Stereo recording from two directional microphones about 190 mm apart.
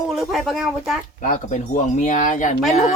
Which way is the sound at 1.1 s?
40° left (ahead or behind).